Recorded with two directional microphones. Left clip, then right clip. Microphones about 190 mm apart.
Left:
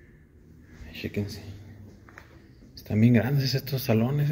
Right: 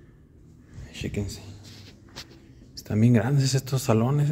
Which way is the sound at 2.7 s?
15° right (ahead or behind).